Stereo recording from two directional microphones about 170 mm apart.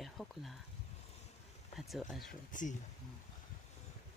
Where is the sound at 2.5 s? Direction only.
50° left (ahead or behind).